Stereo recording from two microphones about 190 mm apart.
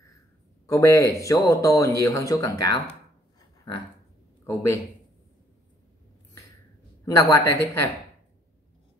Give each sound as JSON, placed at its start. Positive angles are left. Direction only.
{"t": 0.7, "sound": "speech", "side_deg": 15}
{"t": 3.3, "sound": "a sound", "side_deg": 25}
{"t": 4.5, "sound": "speech", "side_deg": 15}
{"t": 7.1, "sound": "speech", "side_deg": 15}